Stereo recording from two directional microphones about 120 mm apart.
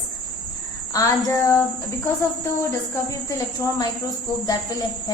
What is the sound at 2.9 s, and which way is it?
A woman's voice, 30° left (ahead or behind).